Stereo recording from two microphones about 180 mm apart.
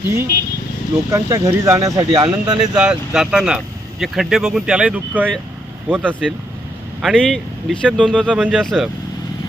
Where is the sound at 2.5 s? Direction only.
5° right (ahead or behind).